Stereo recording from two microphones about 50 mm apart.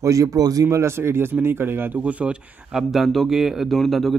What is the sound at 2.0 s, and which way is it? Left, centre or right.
Speech, right.